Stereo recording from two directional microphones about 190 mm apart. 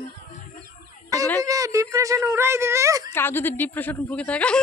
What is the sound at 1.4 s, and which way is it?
Speech, 15° right (ahead or behind).